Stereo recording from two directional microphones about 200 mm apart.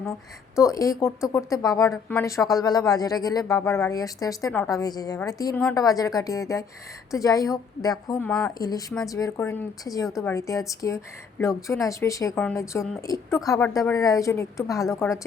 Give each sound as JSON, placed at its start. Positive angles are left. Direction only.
{"t": 0.5, "sound": "speech", "side_deg": 15}
{"t": 8.3, "sound": "speech", "side_deg": 5}
{"t": 8.5, "sound": "speech", "side_deg": 20}